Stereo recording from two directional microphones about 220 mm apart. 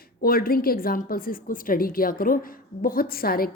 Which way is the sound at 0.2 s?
40° left (ahead or behind).